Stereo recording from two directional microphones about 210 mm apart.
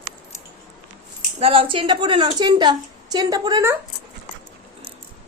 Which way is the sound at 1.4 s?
25° right (ahead or behind).